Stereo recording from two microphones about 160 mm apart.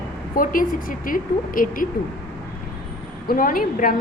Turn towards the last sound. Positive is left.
turn(degrees=55)  # may be behind; listen again after turning